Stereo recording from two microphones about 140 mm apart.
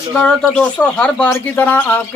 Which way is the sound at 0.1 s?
5° left (ahead or behind).